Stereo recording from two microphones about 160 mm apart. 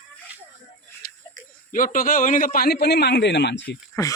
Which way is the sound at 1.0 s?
65° left (ahead or behind).